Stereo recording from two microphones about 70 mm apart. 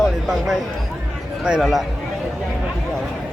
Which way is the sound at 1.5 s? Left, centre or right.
Centre.